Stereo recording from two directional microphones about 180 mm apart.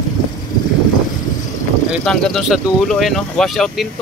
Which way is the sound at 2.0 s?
5° left (ahead or behind).